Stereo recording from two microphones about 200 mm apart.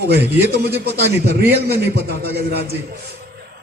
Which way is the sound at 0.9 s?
50° right (ahead or behind).